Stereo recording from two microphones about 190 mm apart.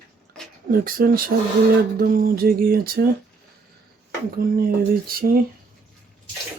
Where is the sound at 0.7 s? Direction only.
50° right (ahead or behind).